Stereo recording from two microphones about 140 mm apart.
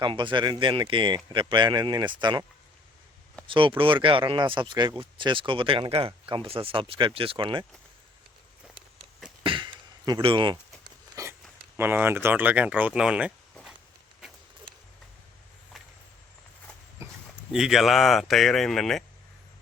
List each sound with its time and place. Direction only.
0.0 s speech: 35° right (ahead or behind)
3.4 s speech: 35° right (ahead or behind)
9.4 s a sound: 35° right (ahead or behind)
10.1 s speech: 35° right (ahead or behind)
11.1 s a sound: 20° right (ahead or behind)
11.8 s speech: 15° right (ahead or behind)
17.5 s speech: 5° right (ahead or behind)